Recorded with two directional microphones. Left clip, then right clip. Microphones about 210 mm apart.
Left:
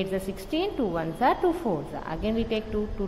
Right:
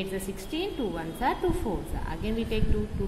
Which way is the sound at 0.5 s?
20° left (ahead or behind).